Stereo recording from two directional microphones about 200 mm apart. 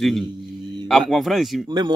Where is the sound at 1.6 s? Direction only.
20° right (ahead or behind).